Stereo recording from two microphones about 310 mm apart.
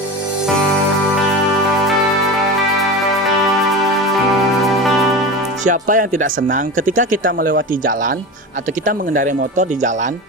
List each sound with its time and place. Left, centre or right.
5.6 s speech: right